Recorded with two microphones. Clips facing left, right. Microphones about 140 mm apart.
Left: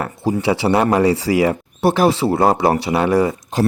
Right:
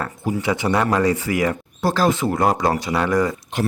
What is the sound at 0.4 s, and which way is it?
Speech, 30° left (ahead or behind).